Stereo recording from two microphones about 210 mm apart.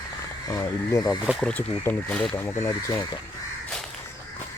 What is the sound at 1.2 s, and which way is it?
Speech, centre (ahead or behind).